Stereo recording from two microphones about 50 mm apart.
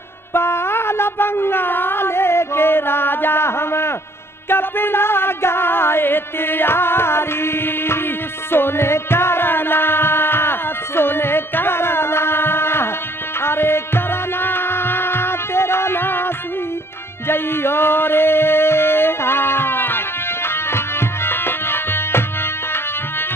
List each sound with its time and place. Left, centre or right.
0.3 s a sound: left
4.5 s music: left
17.3 s music: left